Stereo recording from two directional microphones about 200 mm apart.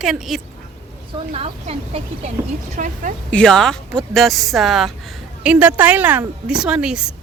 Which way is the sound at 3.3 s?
5° left (ahead or behind).